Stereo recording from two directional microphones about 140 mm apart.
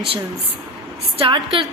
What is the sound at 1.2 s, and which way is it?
Speech, 40° right (ahead or behind).